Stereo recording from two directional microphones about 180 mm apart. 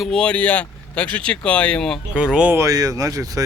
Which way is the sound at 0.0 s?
5° left (ahead or behind).